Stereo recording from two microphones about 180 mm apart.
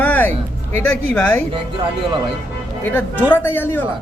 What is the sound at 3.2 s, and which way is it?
Speech, 10° left (ahead or behind).